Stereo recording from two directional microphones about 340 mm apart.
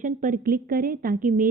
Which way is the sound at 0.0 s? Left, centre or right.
Right.